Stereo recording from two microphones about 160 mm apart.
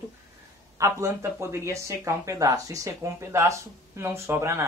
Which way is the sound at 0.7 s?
20° right (ahead or behind).